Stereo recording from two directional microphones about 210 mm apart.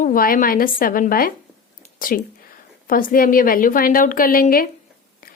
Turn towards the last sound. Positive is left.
turn(degrees=45)  # may be behind; listen again after turning